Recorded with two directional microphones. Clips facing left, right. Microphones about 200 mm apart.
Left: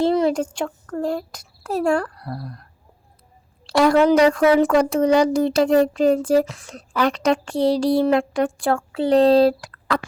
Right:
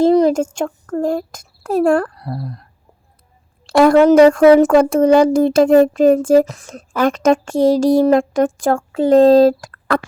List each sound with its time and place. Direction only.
0.0 s a sound: 40° right (ahead or behind)
0.5 s a child's voice: 45° right (ahead or behind)
2.1 s speech: 20° right (ahead or behind)
3.7 s speech: 50° right (ahead or behind)